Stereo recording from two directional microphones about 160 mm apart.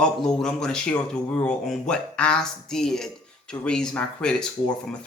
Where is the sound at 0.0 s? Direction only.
5° left (ahead or behind).